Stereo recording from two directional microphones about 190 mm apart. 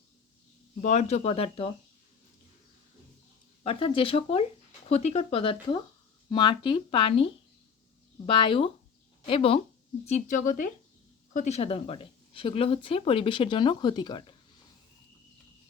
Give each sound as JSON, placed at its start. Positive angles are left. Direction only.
{"t": 0.8, "sound": "speech", "side_deg": 35}
{"t": 3.6, "sound": "speech", "side_deg": 30}
{"t": 8.3, "sound": "speech", "side_deg": 30}